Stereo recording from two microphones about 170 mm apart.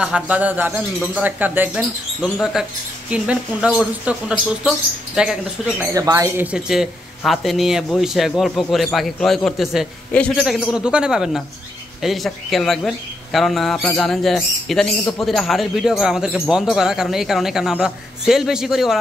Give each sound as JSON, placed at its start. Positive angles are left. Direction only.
{"t": 0.0, "sound": "speech", "side_deg": -10}
{"t": 5.8, "sound": "speech", "side_deg": -20}